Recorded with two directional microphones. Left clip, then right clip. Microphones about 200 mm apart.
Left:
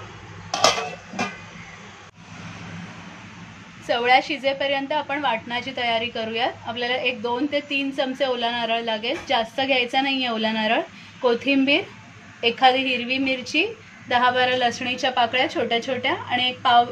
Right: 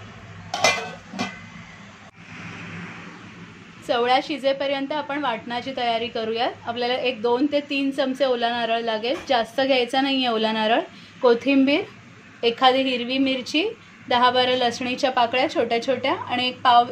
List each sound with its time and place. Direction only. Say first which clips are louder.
3.8 s a woman's voice: left 2 dB; 10° right (ahead or behind)